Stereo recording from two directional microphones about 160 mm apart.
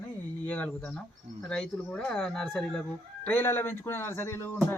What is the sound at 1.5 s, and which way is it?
Speech, 5° left (ahead or behind).